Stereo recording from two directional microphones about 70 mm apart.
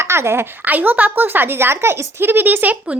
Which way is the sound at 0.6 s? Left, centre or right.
Right.